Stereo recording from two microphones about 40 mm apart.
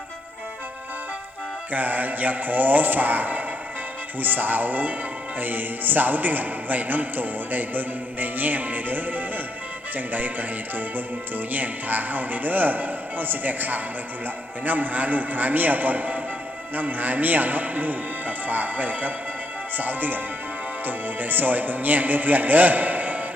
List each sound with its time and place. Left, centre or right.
1.7 s a man's voice: right